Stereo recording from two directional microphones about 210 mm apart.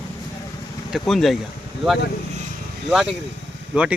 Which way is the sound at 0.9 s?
Centre (ahead or behind).